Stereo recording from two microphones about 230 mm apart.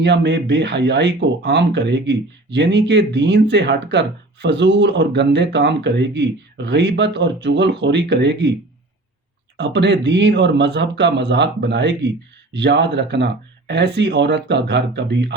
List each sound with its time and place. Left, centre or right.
0.0 s speech: right
9.6 s speech: right